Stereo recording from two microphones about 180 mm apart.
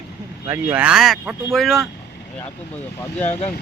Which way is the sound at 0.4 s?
15° right (ahead or behind).